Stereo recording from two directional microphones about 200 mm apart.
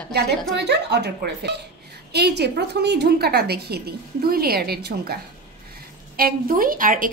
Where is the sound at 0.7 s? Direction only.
55° right (ahead or behind).